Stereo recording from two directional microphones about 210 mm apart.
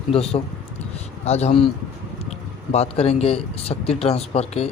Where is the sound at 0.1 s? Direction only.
25° left (ahead or behind).